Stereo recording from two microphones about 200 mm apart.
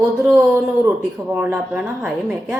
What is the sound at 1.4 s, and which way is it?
A woman's voice, 5° right (ahead or behind).